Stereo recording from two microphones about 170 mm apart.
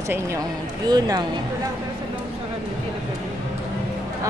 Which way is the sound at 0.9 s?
25° right (ahead or behind).